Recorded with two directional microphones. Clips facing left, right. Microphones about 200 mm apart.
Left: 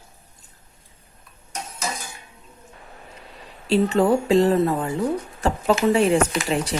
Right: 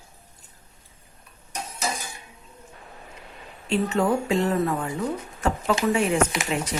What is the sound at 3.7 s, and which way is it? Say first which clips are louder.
Speech: left 5 dB; 35° left (ahead or behind).